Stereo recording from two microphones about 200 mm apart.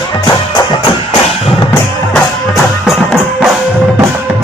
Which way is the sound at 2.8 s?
Centre (ahead or behind).